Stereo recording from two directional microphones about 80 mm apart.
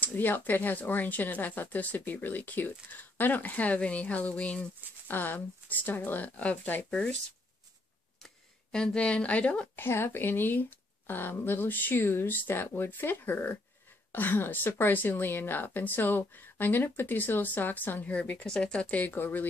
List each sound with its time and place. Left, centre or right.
0.0 s speech: left
8.7 s speech: centre
9.8 s speech: left